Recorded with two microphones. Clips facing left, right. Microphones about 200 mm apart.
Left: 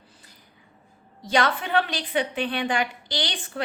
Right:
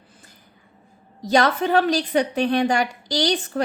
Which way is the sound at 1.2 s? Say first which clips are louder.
Right 5 dB; 40° right (ahead or behind).